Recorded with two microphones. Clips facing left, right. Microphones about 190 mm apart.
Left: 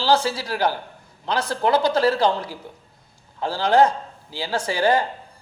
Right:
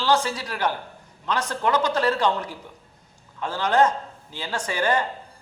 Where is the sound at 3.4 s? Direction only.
35° left (ahead or behind).